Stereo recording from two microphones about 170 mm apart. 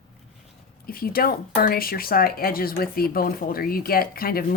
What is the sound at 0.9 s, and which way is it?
Speech, 60° left (ahead or behind).